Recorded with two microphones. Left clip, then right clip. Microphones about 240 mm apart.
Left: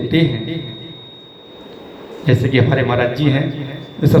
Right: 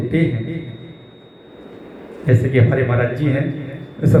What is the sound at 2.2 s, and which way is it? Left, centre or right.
A man's voice, left.